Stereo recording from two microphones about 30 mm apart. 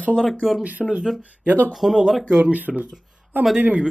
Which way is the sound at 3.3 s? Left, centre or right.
Right.